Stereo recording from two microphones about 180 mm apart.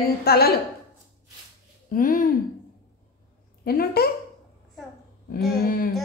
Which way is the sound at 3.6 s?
60° left (ahead or behind).